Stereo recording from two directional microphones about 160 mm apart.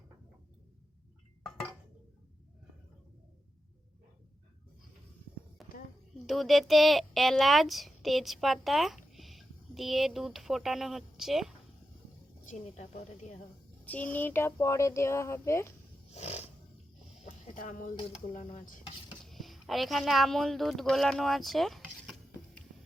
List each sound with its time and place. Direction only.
5.6 s a sound: centre (ahead or behind)
6.2 s speech: centre (ahead or behind)
12.5 s a woman's voice: 45° left (ahead or behind)
13.8 s speech: 10° left (ahead or behind)
16.1 s a sound: 40° left (ahead or behind)
17.2 s music: 55° left (ahead or behind)
18.3 s speech: 55° left (ahead or behind)
19.2 s speech: centre (ahead or behind)